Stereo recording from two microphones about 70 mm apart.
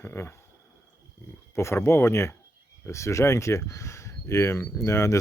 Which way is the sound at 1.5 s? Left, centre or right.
Left.